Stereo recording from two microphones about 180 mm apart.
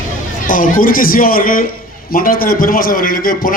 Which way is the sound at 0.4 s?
50° left (ahead or behind).